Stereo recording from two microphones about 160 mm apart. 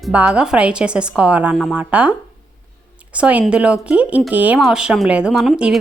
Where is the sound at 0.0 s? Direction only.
5° right (ahead or behind).